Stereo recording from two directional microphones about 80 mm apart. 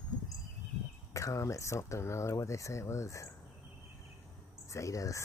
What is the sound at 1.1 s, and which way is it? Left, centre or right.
Speech, left.